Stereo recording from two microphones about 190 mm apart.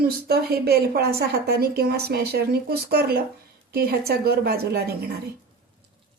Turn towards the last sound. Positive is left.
turn(degrees=-55)  # may be behind; listen again after turning